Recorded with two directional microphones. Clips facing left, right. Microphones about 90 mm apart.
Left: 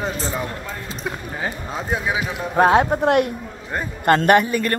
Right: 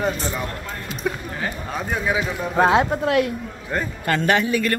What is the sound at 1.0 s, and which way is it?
Speech, 15° left (ahead or behind).